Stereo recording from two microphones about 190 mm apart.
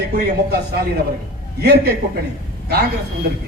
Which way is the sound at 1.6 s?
55° right (ahead or behind).